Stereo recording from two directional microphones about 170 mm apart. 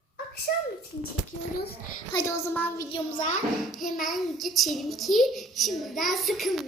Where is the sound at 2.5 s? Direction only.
10° left (ahead or behind).